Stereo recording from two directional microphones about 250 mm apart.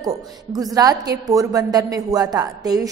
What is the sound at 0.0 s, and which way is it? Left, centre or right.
A woman's voice, centre.